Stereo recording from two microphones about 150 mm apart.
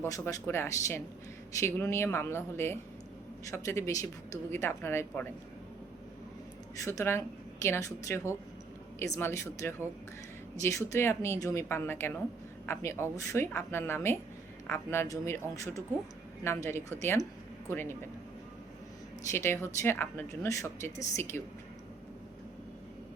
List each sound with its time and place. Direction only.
0.0 s speech: 20° left (ahead or behind)
6.8 s a woman's voice: 20° left (ahead or behind)
19.3 s speech: 15° left (ahead or behind)